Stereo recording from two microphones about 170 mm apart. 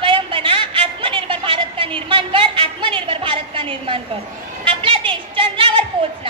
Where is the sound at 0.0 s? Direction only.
30° right (ahead or behind).